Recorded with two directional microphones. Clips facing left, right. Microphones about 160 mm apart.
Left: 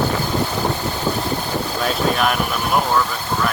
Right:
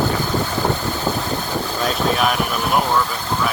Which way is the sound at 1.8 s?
Centre (ahead or behind).